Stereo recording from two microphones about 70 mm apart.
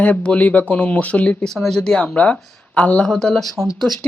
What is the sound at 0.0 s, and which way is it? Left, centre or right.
Speech, centre.